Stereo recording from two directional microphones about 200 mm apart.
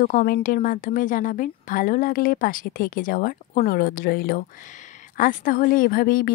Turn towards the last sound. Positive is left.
turn(degrees=45)  # may be behind; listen again after turning